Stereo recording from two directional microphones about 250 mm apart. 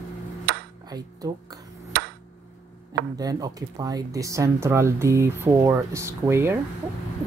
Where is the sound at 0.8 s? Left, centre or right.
Centre.